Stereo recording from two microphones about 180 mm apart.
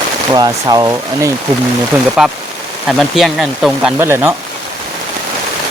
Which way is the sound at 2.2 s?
5° right (ahead or behind).